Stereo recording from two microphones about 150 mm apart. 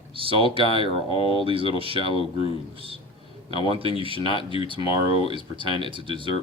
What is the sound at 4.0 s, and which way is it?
Speech, 35° right (ahead or behind).